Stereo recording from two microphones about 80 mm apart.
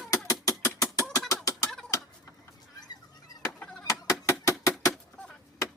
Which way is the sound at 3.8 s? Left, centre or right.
Left.